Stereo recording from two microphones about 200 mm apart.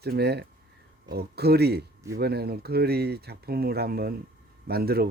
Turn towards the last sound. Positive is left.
turn(degrees=-50)  # may be behind; listen again after turning